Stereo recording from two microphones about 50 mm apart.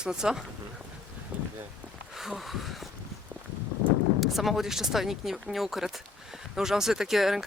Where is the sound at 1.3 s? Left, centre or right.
Right.